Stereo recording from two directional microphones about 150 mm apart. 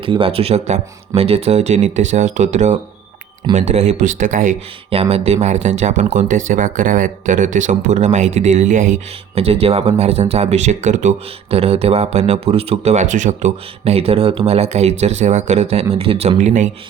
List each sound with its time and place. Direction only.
0.0 s speech: 35° right (ahead or behind); by 4.5 s 60° right (ahead or behind)
4.9 s speech: 40° right (ahead or behind); by 9.0 s 60° right (ahead or behind)
9.3 s speech: 40° right (ahead or behind)
11.5 s speech: 45° right (ahead or behind)